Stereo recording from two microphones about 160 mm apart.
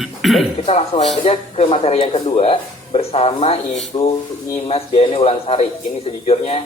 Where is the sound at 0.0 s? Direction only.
Centre (ahead or behind).